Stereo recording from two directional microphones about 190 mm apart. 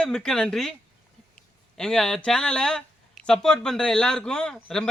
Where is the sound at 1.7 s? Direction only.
5° left (ahead or behind).